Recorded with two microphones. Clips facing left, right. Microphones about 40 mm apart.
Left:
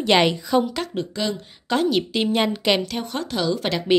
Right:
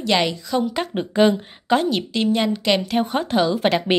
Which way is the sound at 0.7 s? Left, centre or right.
Right.